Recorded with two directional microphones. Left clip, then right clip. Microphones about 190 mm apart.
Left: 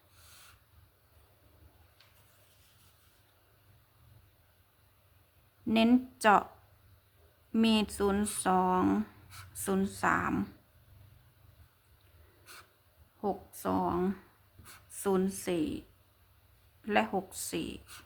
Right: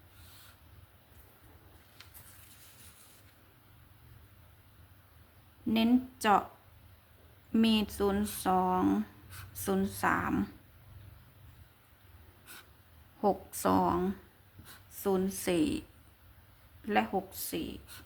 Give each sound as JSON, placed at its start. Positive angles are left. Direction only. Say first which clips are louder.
{"t": 5.6, "sound": "speech", "louder": "left 2 dB", "side_deg": 15}
{"t": 7.5, "sound": "speech", "louder": "even", "side_deg": 10}
{"t": 13.2, "sound": "a woman's voice", "louder": "right 5 dB", "side_deg": -10}
{"t": 15.0, "sound": "speech", "louder": "left 1 dB", "side_deg": 15}
{"t": 15.4, "sound": "speech", "louder": "right 3 dB", "side_deg": 0}
{"t": 16.8, "sound": "speech", "louder": "left 1 dB", "side_deg": 10}